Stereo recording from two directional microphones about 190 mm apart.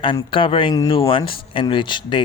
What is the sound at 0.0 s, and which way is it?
Speech, 25° left (ahead or behind).